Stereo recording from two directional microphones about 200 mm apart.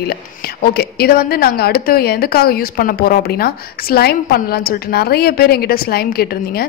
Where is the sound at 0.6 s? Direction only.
50° left (ahead or behind).